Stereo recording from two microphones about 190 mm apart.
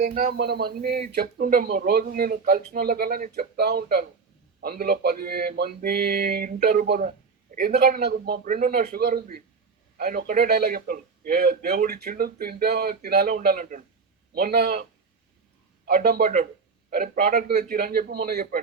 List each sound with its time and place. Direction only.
0.0 s a man's voice: 40° right (ahead or behind)
0.3 s speech: 60° right (ahead or behind)
16.0 s speech: 50° right (ahead or behind)